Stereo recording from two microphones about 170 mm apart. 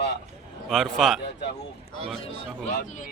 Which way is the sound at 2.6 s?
50° left (ahead or behind).